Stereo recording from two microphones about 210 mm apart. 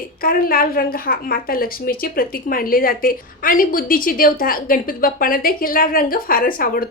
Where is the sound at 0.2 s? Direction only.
45° left (ahead or behind).